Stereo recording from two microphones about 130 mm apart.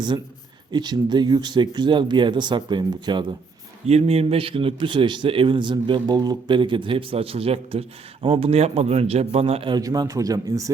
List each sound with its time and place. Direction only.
0.7 s speech: 35° right (ahead or behind)
3.8 s speech: 55° right (ahead or behind)
9.7 s a man's voice: 30° right (ahead or behind)